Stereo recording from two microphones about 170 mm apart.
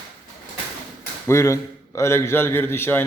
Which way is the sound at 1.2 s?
15° left (ahead or behind).